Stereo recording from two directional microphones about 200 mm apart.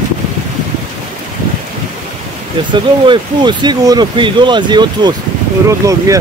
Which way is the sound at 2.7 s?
25° right (ahead or behind).